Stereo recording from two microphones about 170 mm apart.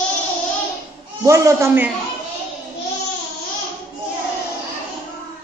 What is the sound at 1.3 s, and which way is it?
Speech, 15° right (ahead or behind).